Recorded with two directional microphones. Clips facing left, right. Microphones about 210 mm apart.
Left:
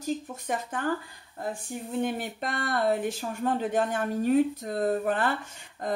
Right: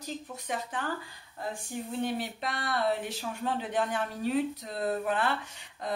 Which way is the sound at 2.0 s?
50° left (ahead or behind).